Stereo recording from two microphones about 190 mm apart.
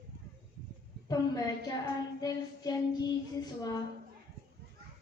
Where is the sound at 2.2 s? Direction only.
20° left (ahead or behind).